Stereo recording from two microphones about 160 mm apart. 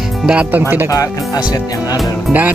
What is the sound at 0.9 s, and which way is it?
Speech, 20° left (ahead or behind).